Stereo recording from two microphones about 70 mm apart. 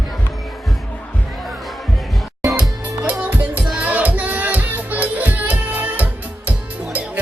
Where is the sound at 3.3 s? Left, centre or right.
Right.